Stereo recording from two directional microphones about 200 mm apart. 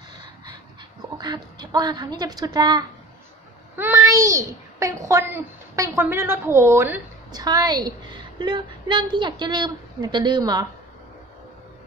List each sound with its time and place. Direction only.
1.1 s a woman's voice: 20° right (ahead or behind)